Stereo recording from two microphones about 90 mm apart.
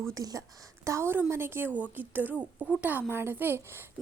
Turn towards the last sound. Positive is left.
turn(degrees=-25)  # may be behind; listen again after turning